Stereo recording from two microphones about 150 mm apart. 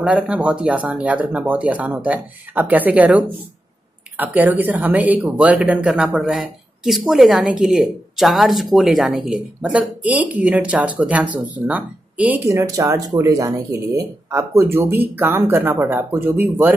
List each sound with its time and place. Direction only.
0.0 s speech: 10° right (ahead or behind)
12.4 s speech: 20° right (ahead or behind)